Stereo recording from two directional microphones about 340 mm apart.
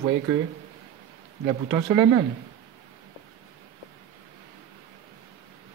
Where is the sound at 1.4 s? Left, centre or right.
Centre.